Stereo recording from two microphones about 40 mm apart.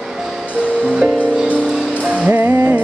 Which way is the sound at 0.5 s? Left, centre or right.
Right.